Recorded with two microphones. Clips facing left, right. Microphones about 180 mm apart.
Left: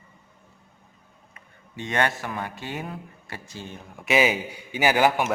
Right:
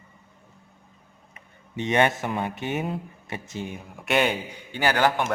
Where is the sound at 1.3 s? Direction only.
20° right (ahead or behind).